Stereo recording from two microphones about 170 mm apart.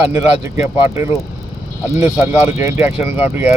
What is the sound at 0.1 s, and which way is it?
Speech, 15° right (ahead or behind).